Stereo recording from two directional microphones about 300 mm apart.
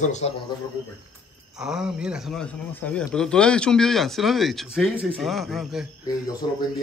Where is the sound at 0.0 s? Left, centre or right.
Left.